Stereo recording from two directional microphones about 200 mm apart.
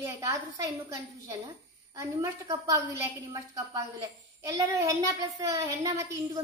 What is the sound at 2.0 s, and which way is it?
A woman's voice, 15° right (ahead or behind).